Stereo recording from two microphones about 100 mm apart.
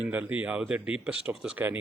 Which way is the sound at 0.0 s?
15° right (ahead or behind).